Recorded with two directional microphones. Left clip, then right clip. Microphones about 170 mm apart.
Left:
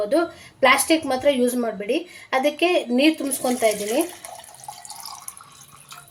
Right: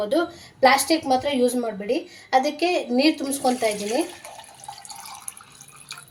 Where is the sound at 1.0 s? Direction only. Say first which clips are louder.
Left 1 dB; 30° left (ahead or behind).